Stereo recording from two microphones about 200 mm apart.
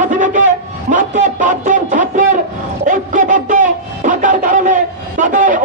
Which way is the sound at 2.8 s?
40° right (ahead or behind).